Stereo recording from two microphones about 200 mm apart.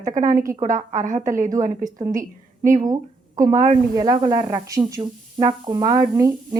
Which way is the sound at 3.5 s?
40° right (ahead or behind).